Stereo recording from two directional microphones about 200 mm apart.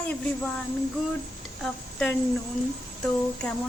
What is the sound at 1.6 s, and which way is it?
Speech, 5° left (ahead or behind).